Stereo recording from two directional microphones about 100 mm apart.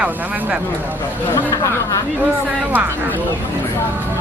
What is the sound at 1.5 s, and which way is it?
Speech, 35° left (ahead or behind).